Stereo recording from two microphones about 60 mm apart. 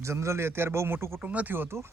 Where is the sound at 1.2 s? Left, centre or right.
Right.